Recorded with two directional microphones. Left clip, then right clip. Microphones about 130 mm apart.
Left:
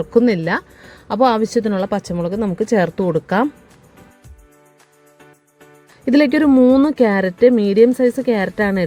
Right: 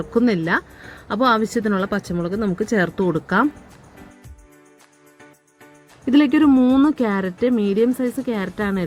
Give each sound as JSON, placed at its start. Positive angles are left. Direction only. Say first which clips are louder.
{"t": 0.0, "sound": "a woman's voice", "louder": "left 5 dB", "side_deg": 25}
{"t": 6.1, "sound": "speech", "louder": "left 2 dB", "side_deg": 30}
{"t": 6.5, "sound": "a woman's voice", "louder": "left 4 dB", "side_deg": 20}
{"t": 6.8, "sound": "speech", "louder": "left 5 dB", "side_deg": 35}